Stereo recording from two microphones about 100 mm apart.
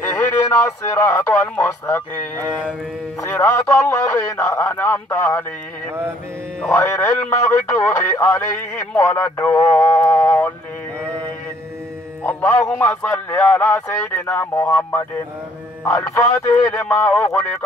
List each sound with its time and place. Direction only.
0.0 s a sound: 20° left (ahead or behind)
0.7 s a man's voice: 30° left (ahead or behind)
4.6 s a man's voice: 15° left (ahead or behind)
6.7 s a man's voice: 25° left (ahead or behind)
12.2 s a man's voice: 15° left (ahead or behind)